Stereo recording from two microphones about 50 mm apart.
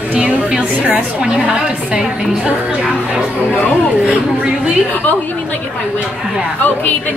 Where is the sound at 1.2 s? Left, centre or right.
Centre.